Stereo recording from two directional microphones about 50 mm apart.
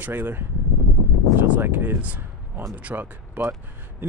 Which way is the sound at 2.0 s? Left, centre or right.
Right.